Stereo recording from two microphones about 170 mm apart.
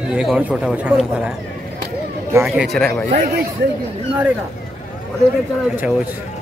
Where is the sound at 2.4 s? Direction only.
Centre (ahead or behind).